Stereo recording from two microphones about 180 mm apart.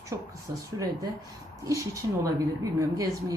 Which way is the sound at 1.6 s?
20° right (ahead or behind).